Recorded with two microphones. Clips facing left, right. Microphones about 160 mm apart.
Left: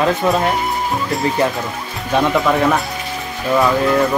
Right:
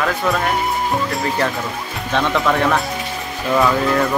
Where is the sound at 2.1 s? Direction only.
10° left (ahead or behind).